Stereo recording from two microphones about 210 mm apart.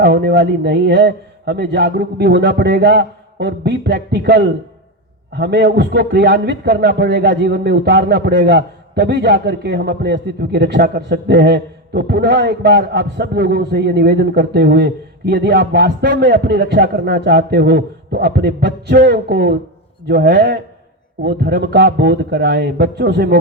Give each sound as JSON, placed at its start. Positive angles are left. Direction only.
{"t": 0.0, "sound": "a man's voice", "side_deg": -50}